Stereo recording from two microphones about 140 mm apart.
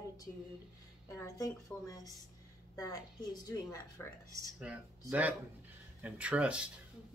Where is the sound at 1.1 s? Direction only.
20° left (ahead or behind).